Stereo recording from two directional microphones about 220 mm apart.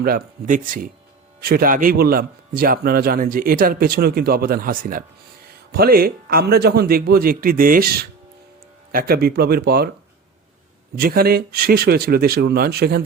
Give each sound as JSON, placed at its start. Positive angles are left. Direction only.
{"t": 0.0, "sound": "a man's voice", "side_deg": -40}
{"t": 10.9, "sound": "a man's voice", "side_deg": -45}